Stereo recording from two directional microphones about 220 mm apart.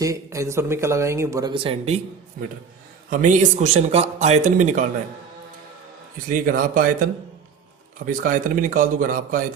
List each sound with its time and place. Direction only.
0.0 s speech: 15° right (ahead or behind)
3.1 s a man's voice: 35° right (ahead or behind)
6.3 s a man's voice: 40° right (ahead or behind)
8.2 s a man's voice: 35° right (ahead or behind)